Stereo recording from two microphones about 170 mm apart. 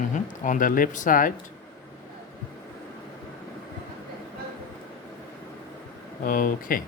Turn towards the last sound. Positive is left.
turn(degrees=55)  # may be behind; listen again after turning